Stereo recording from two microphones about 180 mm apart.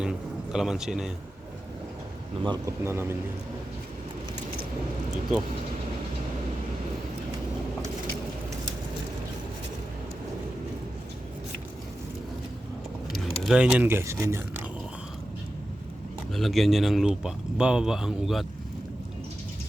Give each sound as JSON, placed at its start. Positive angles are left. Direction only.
{"t": 0.0, "sound": "a man's voice", "side_deg": -5}
{"t": 2.4, "sound": "a man's voice", "side_deg": -25}
{"t": 2.8, "sound": "a man's voice", "side_deg": -15}
{"t": 13.1, "sound": "speech", "side_deg": 0}
{"t": 16.3, "sound": "speech", "side_deg": 0}